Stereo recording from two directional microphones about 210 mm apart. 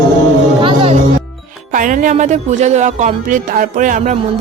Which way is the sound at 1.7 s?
40° right (ahead or behind).